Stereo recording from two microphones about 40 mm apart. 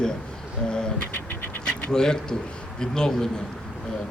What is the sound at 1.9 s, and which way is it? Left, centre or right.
Speech, centre.